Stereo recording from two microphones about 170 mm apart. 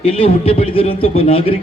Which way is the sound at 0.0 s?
35° left (ahead or behind).